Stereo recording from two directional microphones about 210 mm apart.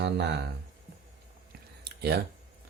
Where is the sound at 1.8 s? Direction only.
50° right (ahead or behind).